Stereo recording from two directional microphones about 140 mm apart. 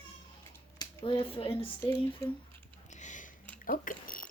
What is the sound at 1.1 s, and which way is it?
Speech, 40° left (ahead or behind).